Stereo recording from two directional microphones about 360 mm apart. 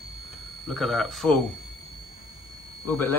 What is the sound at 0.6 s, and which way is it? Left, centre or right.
Speech, centre.